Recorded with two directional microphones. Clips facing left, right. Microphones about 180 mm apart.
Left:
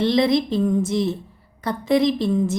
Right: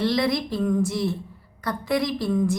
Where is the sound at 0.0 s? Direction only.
25° left (ahead or behind).